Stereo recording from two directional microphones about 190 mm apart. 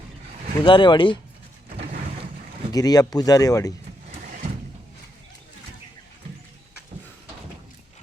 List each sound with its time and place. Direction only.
0.6 s speech: 25° left (ahead or behind)
2.7 s speech: 20° left (ahead or behind)